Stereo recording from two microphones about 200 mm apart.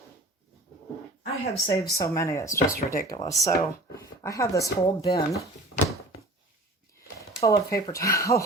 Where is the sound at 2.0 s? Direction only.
15° left (ahead or behind).